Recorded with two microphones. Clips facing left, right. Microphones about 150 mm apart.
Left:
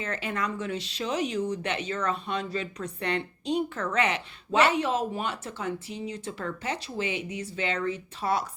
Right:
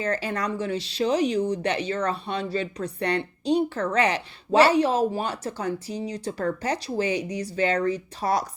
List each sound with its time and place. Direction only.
0.0 s speech: 35° right (ahead or behind)